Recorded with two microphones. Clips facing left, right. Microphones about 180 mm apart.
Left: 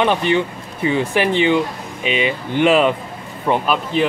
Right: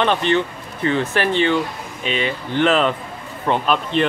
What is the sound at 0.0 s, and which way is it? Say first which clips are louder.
Speech: left 1 dB; 10° left (ahead or behind).